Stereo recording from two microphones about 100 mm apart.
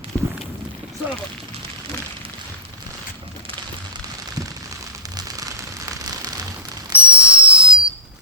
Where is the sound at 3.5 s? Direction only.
65° right (ahead or behind).